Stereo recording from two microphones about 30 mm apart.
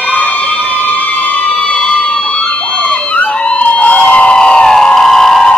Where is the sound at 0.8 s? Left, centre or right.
Left.